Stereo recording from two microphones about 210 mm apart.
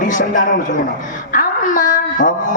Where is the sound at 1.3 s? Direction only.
40° left (ahead or behind).